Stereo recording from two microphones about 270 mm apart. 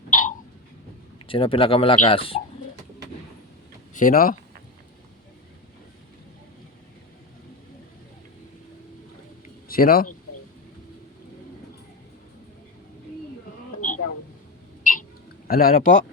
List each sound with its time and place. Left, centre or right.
0.1 s a sound: left
1.3 s speech: centre
3.9 s speech: left
9.6 s speech: left
14.8 s a sound: left
15.4 s speech: left